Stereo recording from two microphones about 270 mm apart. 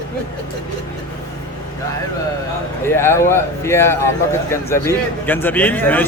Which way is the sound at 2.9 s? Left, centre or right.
Centre.